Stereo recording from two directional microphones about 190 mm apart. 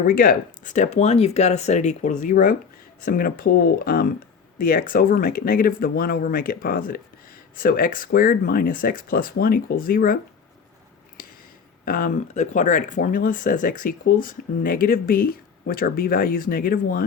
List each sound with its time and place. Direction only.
0.1 s speech: 50° left (ahead or behind)
11.9 s speech: 45° left (ahead or behind)